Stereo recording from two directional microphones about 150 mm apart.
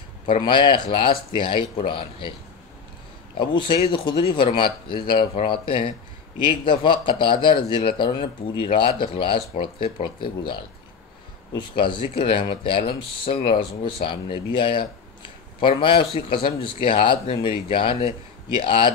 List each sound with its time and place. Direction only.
0.4 s a man's voice: 30° left (ahead or behind)
3.3 s a man's voice: 35° left (ahead or behind)